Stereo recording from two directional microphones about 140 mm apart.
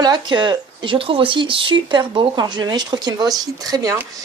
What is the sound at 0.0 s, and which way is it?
Speech, 30° right (ahead or behind).